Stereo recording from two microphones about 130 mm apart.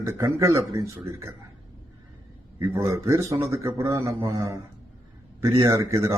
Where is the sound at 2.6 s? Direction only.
20° right (ahead or behind).